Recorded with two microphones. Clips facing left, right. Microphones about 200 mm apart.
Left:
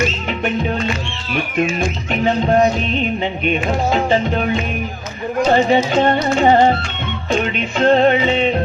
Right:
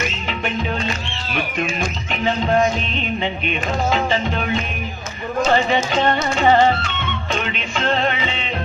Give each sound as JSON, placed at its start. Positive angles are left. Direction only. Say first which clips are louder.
{"t": 0.3, "sound": "music", "louder": "left 4 dB", "side_deg": 50}
{"t": 2.2, "sound": "music", "louder": "left 3 dB", "side_deg": 40}
{"t": 5.5, "sound": "music", "louder": "left 5 dB", "side_deg": 45}